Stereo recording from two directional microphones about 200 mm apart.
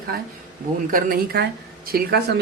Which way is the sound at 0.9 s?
45° right (ahead or behind).